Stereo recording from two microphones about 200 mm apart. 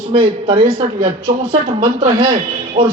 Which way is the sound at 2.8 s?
25° right (ahead or behind).